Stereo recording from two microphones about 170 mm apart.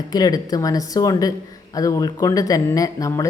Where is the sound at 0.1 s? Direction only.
20° left (ahead or behind).